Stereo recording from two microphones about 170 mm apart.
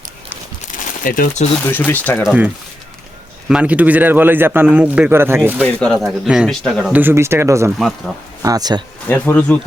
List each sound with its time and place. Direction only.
1.0 s speech: 55° left (ahead or behind)
1.9 s speech: 10° left (ahead or behind)
2.2 s a man's voice: 10° right (ahead or behind)
3.5 s a man's voice: 10° right (ahead or behind)
5.6 s speech: 5° left (ahead or behind)
6.9 s a man's voice: 15° right (ahead or behind)
7.8 s speech: centre (ahead or behind)
8.4 s speech: 20° right (ahead or behind)
9.0 s speech: 10° left (ahead or behind)